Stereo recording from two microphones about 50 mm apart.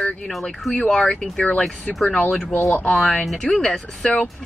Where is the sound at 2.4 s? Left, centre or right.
Left.